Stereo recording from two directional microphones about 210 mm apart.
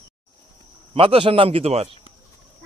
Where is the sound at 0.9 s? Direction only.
25° right (ahead or behind).